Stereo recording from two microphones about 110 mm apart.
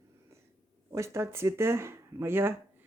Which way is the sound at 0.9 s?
25° right (ahead or behind).